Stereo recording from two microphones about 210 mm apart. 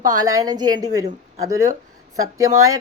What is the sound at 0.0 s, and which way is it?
Speech, 15° right (ahead or behind).